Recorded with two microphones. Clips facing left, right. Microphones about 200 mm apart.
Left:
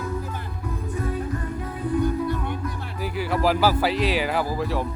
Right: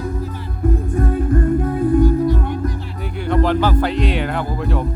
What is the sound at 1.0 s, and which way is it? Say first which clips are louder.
Music: right 9 dB; 50° right (ahead or behind).